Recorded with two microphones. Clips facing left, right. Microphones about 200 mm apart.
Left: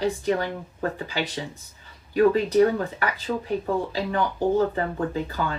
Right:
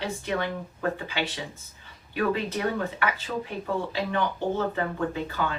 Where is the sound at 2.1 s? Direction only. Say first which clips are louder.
Left 8 dB; 35° left (ahead or behind).